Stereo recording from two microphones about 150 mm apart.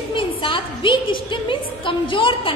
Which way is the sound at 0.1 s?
35° left (ahead or behind).